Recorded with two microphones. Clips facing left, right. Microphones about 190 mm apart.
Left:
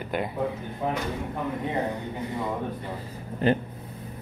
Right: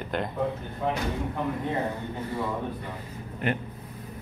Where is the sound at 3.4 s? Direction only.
30° left (ahead or behind).